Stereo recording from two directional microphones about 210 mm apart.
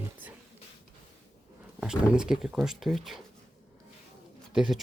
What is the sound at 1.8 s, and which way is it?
Speech, 5° right (ahead or behind).